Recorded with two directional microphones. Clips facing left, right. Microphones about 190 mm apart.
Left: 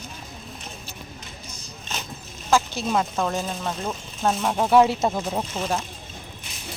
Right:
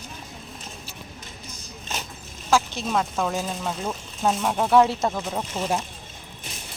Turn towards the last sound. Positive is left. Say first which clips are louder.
# right 1 dB
turn(degrees=-10)  # may be behind; listen again after turning